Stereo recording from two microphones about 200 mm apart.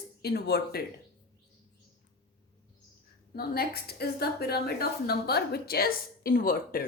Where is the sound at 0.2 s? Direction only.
50° left (ahead or behind).